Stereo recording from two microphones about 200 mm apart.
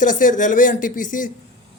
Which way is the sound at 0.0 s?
40° left (ahead or behind).